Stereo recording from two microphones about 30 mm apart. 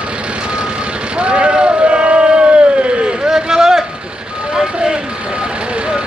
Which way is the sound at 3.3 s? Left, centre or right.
Right.